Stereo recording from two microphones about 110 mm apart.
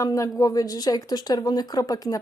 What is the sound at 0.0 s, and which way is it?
Speech, 30° left (ahead or behind).